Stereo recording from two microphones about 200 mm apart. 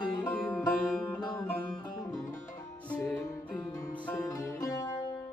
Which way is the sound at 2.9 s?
5° left (ahead or behind).